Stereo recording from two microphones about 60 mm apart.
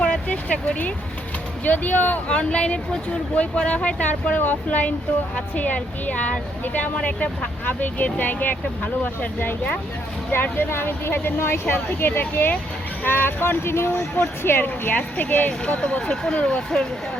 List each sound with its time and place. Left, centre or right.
0.0 s vehicle: centre
1.6 s speech: left
2.3 s speech: centre